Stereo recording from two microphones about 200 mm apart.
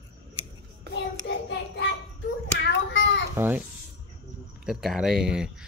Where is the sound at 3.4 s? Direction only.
10° right (ahead or behind).